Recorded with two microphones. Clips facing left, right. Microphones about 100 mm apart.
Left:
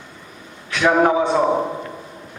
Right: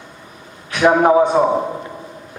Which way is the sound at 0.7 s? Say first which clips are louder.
Right 4 dB; 15° right (ahead or behind).